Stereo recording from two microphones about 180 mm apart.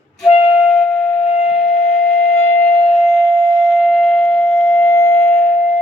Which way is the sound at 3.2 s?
25° right (ahead or behind).